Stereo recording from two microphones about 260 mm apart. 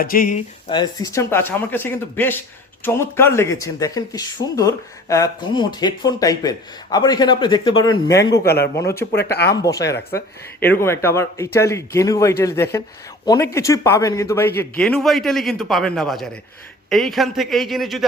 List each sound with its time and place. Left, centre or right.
0.0 s speech: left
0.7 s speech: centre
7.9 s speech: left
8.3 s speech: left
9.5 s a man's voice: centre